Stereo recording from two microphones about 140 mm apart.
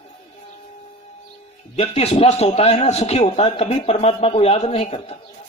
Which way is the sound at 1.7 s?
50° left (ahead or behind).